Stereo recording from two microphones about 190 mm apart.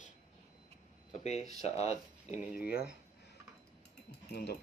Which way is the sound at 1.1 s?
35° left (ahead or behind).